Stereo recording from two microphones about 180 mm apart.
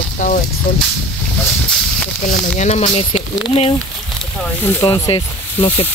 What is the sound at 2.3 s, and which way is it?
Speech, 40° left (ahead or behind).